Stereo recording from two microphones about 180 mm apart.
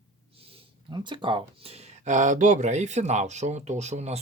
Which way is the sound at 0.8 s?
25° right (ahead or behind).